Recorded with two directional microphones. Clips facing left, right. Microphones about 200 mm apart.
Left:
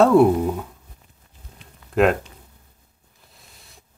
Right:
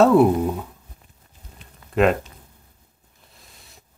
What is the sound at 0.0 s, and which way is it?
Speech, centre (ahead or behind).